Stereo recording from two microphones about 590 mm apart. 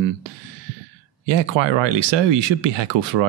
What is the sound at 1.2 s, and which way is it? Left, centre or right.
Speech, right.